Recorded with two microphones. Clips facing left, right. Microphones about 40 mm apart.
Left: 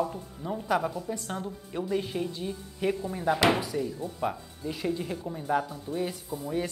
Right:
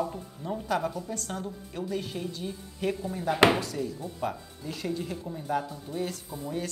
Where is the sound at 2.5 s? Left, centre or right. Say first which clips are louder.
Even; centre.